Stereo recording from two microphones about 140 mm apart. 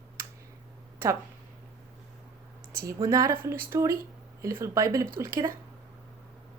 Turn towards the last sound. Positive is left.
turn(degrees=-20)  # may be behind; listen again after turning